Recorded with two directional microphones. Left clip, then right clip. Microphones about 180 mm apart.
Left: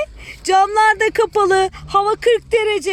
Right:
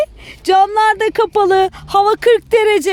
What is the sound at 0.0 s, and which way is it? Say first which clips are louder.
Female singing: right 5 dB; 30° right (ahead or behind).